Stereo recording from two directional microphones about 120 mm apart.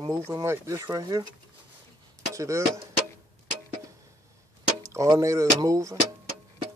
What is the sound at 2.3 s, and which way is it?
Speech, 25° right (ahead or behind).